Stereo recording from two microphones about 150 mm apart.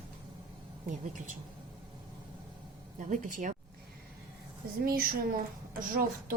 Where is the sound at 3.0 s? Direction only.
60° right (ahead or behind).